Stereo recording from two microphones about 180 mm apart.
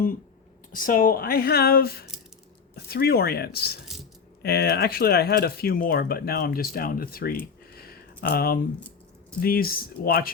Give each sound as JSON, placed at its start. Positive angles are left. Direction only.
{"t": 0.7, "sound": "speech", "side_deg": 50}
{"t": 7.8, "sound": "a sound", "side_deg": 55}
{"t": 9.4, "sound": "speech", "side_deg": 55}